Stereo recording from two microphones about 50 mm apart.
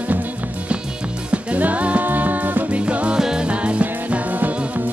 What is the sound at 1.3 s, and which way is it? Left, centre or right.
Music, right.